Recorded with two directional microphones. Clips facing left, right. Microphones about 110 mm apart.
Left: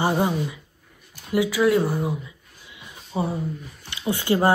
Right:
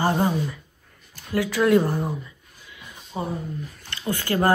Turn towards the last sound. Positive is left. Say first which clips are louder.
# left 1 dB
turn(degrees=20)  # may be behind; listen again after turning